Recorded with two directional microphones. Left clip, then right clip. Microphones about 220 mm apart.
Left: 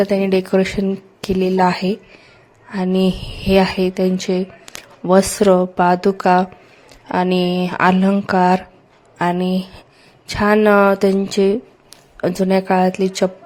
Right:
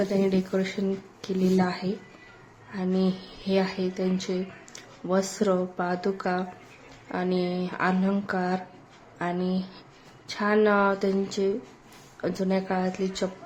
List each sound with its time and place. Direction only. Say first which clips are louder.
0.1 s a woman's voice: left 10 dB; 40° left (ahead or behind)